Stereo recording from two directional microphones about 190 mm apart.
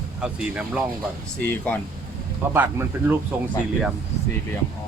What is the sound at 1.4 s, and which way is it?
Speech, 10° left (ahead or behind).